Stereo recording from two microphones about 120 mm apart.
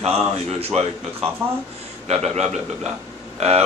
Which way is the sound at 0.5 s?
60° right (ahead or behind).